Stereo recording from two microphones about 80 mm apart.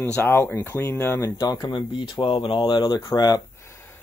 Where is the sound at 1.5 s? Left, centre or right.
Left.